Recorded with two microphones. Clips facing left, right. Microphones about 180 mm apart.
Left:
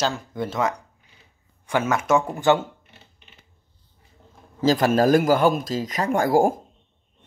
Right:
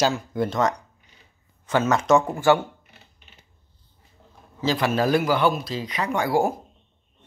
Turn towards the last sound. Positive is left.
turn(degrees=45)  # may be behind; listen again after turning